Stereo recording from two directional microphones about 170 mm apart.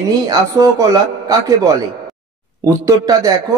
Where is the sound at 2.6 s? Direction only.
20° right (ahead or behind).